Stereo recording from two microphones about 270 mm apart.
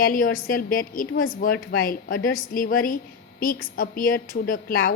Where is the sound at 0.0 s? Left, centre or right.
Left.